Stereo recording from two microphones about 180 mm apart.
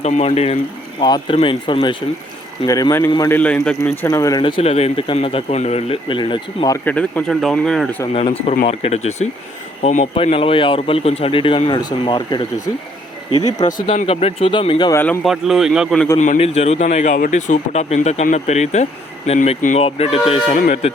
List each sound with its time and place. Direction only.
0.0 s speech: 40° left (ahead or behind)
6.8 s speech: 5° left (ahead or behind)
8.1 s speech: 35° left (ahead or behind)
13.8 s speech: 30° left (ahead or behind)
14.9 s speech: 15° left (ahead or behind)
15.2 s speech: centre (ahead or behind)
16.1 s speech: 40° left (ahead or behind)